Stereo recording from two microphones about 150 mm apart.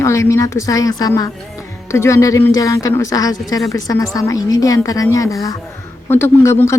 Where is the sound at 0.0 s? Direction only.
20° left (ahead or behind).